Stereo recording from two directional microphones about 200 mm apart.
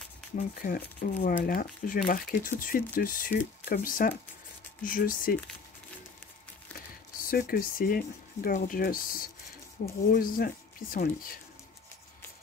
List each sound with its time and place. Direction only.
0.4 s speech: 45° left (ahead or behind)
7.2 s speech: 45° left (ahead or behind)